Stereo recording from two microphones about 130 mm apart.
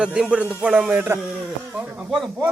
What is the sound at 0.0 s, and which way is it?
Speech, 5° right (ahead or behind).